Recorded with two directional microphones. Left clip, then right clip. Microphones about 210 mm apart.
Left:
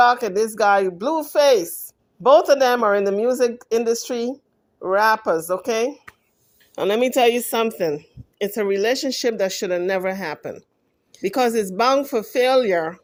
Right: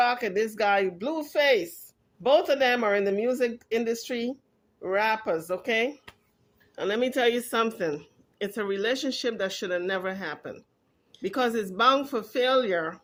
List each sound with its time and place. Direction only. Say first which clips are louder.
0.0 s a woman's voice: left 8 dB; 25° left (ahead or behind)